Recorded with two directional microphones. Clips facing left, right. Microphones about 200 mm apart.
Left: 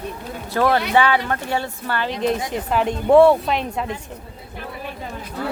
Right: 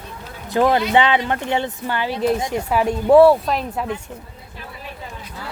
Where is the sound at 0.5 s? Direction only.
15° right (ahead or behind); by 3.8 s centre (ahead or behind).